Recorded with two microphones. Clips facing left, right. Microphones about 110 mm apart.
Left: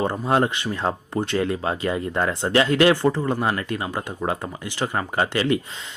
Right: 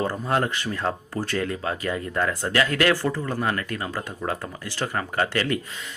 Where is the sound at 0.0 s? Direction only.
25° left (ahead or behind).